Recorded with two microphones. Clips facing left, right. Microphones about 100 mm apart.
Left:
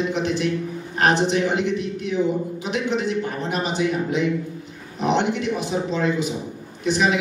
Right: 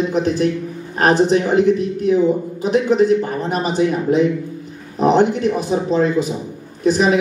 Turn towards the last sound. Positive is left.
turn(degrees=-40)  # may be behind; listen again after turning